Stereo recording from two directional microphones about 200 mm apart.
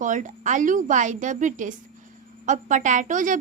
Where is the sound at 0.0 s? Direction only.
40° right (ahead or behind).